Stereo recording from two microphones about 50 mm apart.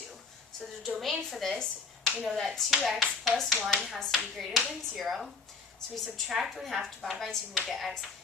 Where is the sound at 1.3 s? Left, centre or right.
Centre.